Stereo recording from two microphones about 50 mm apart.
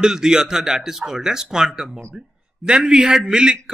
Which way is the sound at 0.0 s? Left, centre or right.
Centre.